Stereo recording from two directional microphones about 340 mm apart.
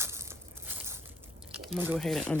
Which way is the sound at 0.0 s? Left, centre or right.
Centre.